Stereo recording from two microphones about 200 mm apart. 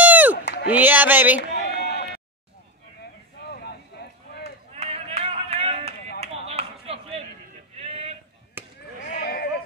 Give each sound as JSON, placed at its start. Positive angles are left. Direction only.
{"t": 0.0, "sound": "a sound", "side_deg": -10}
{"t": 0.7, "sound": "speech", "side_deg": -10}
{"t": 1.4, "sound": "a sound", "side_deg": 60}
{"t": 3.0, "sound": "boat", "side_deg": 55}
{"t": 4.7, "sound": "run", "side_deg": -30}
{"t": 6.2, "sound": "a sound", "side_deg": -30}
{"t": 7.7, "sound": "male singing", "side_deg": -30}
{"t": 8.6, "sound": "chop", "side_deg": -10}
{"t": 9.2, "sound": "sheep", "side_deg": 50}